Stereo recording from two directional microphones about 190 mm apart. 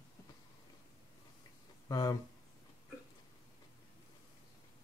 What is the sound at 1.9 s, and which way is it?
Speech, 20° left (ahead or behind).